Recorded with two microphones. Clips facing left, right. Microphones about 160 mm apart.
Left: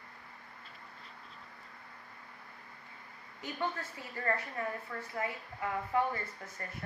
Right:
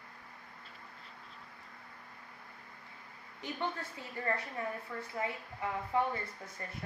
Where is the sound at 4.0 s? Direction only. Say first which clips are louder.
Left 2 dB; 15° right (ahead or behind).